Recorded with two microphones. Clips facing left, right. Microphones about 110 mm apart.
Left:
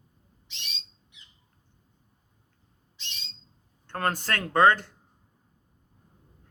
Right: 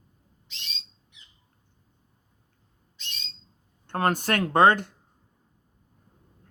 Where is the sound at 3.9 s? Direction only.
20° right (ahead or behind).